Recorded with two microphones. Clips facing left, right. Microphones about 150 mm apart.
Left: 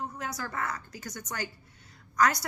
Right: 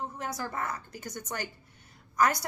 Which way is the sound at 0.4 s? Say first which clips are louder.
Left 1 dB; 20° right (ahead or behind).